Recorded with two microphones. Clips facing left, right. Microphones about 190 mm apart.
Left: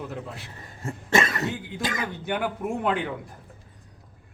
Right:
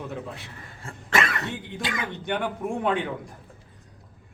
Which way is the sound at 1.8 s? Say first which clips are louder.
Left 2 dB; 40° left (ahead or behind).